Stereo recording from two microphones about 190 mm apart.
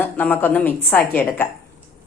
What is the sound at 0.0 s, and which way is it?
A woman's voice, 10° left (ahead or behind).